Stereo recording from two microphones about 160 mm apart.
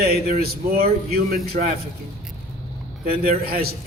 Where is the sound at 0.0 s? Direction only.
70° right (ahead or behind).